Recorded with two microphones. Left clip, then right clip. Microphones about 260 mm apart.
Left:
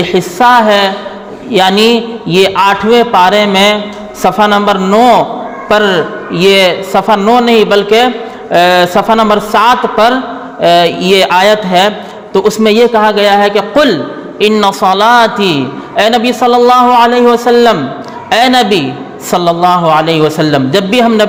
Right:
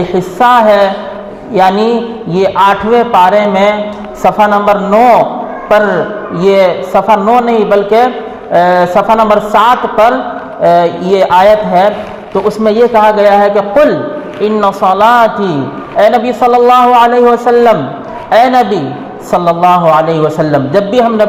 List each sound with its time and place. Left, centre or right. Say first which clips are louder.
0.1 s a man's voice: left 1 dB; left
4.2 s a man's voice: even; left
16.0 s a man's voice: right 1 dB; left
19.3 s a man's voice: right 1 dB; left